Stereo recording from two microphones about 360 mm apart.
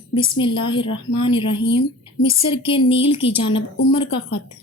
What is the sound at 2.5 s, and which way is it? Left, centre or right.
A woman's voice, centre.